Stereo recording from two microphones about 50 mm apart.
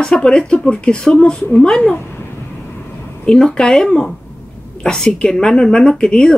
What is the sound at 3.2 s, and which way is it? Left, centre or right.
Speech, centre.